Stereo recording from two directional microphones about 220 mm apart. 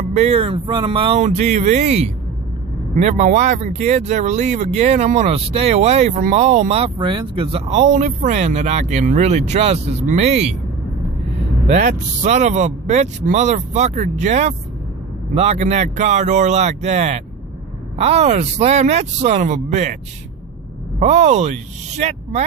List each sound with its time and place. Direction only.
0.1 s speech: 30° right (ahead or behind)
11.7 s speech: 30° right (ahead or behind)
21.0 s speech: 30° right (ahead or behind)